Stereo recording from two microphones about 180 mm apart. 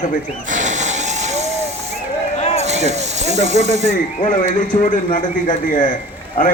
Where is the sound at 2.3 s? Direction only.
35° left (ahead or behind).